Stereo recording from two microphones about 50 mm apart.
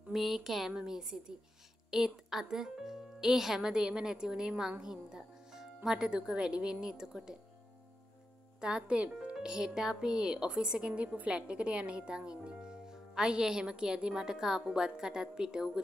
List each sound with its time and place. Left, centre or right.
0.1 s speech: centre
8.5 s speech: centre